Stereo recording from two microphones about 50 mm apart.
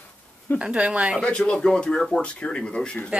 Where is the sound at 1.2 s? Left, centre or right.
Left.